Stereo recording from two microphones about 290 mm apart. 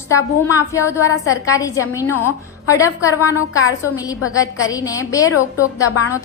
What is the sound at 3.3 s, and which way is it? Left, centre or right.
Speech, left.